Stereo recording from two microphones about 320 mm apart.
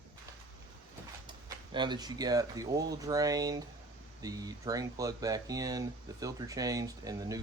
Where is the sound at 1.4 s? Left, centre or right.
Centre.